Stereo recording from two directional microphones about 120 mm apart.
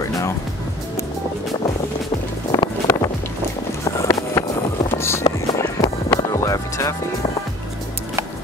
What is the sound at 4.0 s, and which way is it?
Music, 25° left (ahead or behind).